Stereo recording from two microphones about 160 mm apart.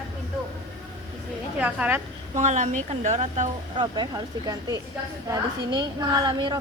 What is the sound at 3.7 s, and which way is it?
A woman's voice, 30° right (ahead or behind).